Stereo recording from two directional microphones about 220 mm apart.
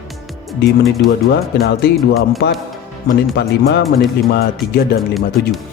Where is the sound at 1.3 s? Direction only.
50° left (ahead or behind).